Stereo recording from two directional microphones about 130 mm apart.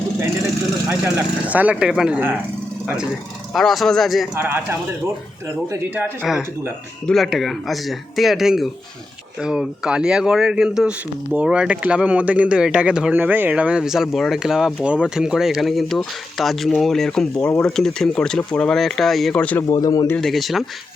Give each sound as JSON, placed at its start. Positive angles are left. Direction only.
{"t": 1.0, "sound": "speech", "side_deg": -10}
{"t": 4.4, "sound": "speech", "side_deg": -15}
{"t": 5.7, "sound": "speech", "side_deg": -15}
{"t": 7.1, "sound": "speech", "side_deg": 0}
{"t": 19.6, "sound": "speech", "side_deg": 30}
{"t": 20.1, "sound": "speech", "side_deg": 5}